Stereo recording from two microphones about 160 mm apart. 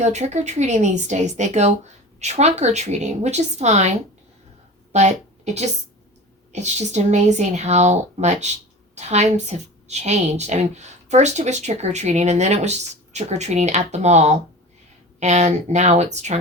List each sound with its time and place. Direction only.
0.0 s a woman's voice: 45° right (ahead or behind)
6.5 s a woman's voice: 45° right (ahead or behind)